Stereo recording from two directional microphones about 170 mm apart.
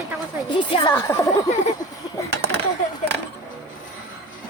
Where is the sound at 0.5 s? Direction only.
30° left (ahead or behind).